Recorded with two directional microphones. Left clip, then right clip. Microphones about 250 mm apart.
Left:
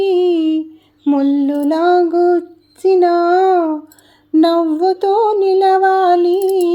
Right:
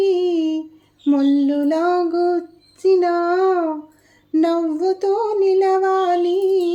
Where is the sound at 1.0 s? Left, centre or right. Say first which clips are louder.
Left 2 dB; centre.